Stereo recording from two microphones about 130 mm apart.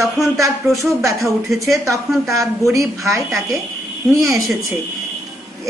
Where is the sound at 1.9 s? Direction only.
25° right (ahead or behind).